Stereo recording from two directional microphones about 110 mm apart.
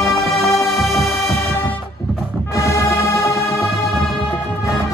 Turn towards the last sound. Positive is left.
turn(degrees=25)  # may be behind; listen again after turning